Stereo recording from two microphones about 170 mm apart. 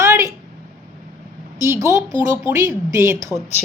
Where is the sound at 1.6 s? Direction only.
15° right (ahead or behind).